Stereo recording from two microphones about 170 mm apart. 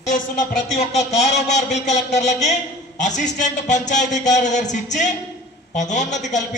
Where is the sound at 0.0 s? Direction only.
50° left (ahead or behind).